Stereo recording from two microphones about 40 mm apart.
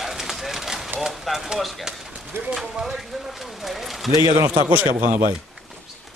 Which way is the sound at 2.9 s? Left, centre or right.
Centre.